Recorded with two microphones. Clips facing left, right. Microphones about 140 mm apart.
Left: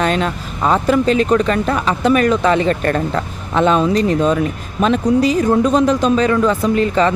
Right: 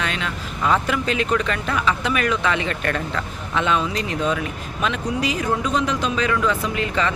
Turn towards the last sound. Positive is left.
turn(degrees=40)  # may be behind; listen again after turning